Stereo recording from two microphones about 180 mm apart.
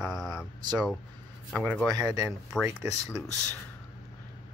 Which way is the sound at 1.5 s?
5° left (ahead or behind).